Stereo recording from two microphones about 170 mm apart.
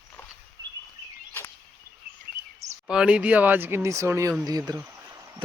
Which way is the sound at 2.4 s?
15° right (ahead or behind).